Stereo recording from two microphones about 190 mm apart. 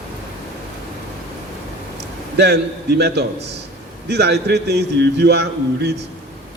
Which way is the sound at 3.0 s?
60° right (ahead or behind).